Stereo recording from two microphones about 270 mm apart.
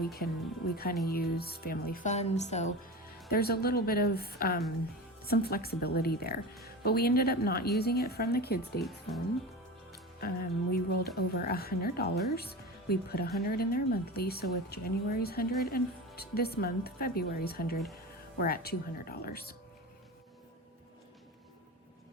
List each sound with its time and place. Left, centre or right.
0.0 s speech: left
8.8 s speech: centre
9.9 s speech: left